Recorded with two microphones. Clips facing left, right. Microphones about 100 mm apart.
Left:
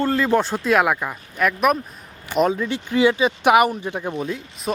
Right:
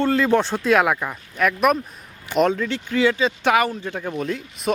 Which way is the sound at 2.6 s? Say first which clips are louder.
Left 2 dB; 15° left (ahead or behind).